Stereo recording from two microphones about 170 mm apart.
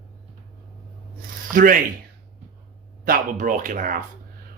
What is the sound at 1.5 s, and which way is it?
Speech, 50° right (ahead or behind).